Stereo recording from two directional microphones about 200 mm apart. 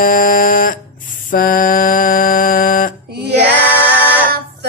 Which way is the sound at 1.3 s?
45° left (ahead or behind).